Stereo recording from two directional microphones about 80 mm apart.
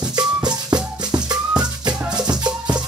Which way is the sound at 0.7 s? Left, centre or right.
Right.